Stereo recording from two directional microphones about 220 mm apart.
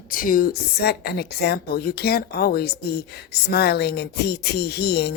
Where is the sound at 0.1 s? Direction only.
40° left (ahead or behind).